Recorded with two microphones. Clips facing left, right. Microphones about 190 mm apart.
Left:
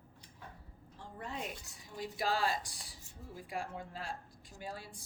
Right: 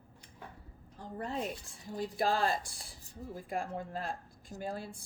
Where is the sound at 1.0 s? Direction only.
40° right (ahead or behind).